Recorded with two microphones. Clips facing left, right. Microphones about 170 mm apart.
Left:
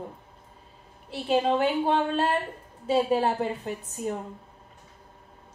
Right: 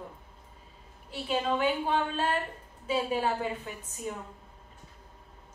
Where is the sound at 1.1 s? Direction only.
40° left (ahead or behind).